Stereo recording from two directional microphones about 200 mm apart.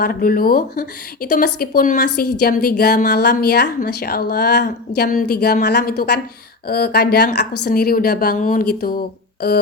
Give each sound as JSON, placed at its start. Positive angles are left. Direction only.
{"t": 0.0, "sound": "a woman's voice", "side_deg": 45}